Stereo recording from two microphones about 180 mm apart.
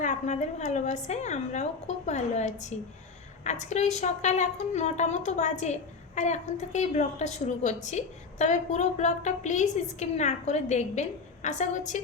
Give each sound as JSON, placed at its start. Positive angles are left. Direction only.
{"t": 0.0, "sound": "a woman's voice", "side_deg": 45}